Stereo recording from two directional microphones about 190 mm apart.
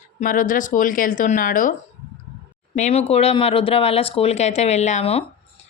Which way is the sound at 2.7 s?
35° left (ahead or behind).